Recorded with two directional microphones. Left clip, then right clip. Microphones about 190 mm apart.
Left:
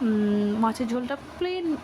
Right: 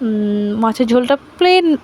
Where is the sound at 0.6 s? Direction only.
40° right (ahead or behind).